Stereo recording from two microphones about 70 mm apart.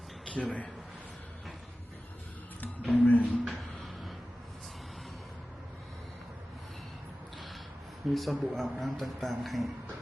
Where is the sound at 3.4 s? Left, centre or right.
Centre.